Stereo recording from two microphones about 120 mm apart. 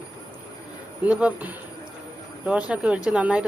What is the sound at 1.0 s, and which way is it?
Speech, 15° right (ahead or behind).